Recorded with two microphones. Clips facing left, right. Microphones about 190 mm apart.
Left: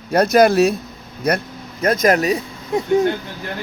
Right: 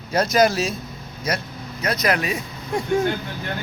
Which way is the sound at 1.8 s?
50° left (ahead or behind).